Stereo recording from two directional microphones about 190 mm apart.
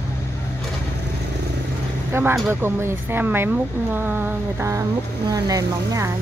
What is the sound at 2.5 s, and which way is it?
Speech, 10° right (ahead or behind).